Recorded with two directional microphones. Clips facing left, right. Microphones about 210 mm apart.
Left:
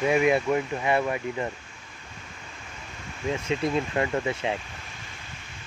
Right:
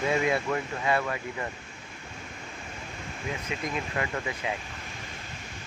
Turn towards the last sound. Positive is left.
turn(degrees=25)  # may be behind; listen again after turning